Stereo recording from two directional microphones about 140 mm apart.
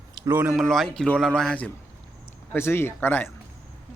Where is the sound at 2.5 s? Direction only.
15° left (ahead or behind).